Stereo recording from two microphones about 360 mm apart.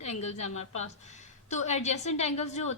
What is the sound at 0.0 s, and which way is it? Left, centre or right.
A woman's voice, centre.